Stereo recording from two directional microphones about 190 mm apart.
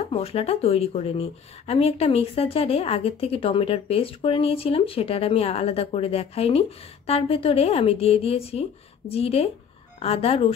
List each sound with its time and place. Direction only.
0.1 s speech: 30° left (ahead or behind)